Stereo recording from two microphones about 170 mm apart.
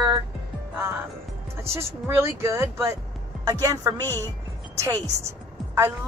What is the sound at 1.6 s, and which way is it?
A woman's voice, 15° right (ahead or behind).